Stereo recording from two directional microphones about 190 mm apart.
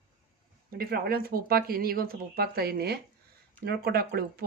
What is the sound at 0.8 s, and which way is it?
Speech, 50° right (ahead or behind).